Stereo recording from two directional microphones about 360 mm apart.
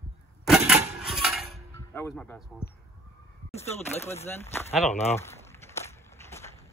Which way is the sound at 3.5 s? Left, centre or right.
Centre.